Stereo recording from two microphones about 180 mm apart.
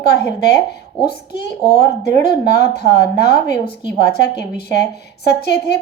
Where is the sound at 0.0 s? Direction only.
65° left (ahead or behind).